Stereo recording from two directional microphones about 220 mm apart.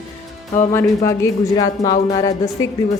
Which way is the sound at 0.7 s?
10° left (ahead or behind).